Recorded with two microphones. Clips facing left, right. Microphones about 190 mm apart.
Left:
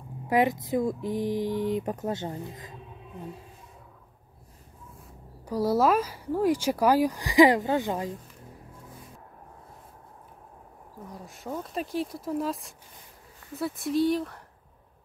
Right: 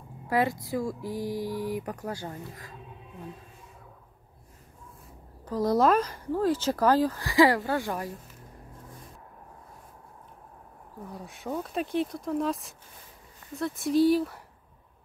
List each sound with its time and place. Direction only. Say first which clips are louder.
0.3 s speech: left 3 dB; 20° left (ahead or behind)
5.4 s speech: even; 10° left (ahead or behind)
11.2 s speech: right 2 dB; centre (ahead or behind)